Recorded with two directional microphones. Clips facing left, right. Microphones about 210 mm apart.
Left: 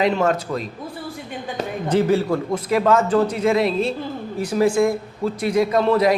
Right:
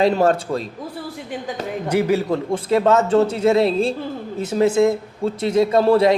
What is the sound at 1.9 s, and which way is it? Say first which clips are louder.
Speech: left 1 dB; 10° right (ahead or behind).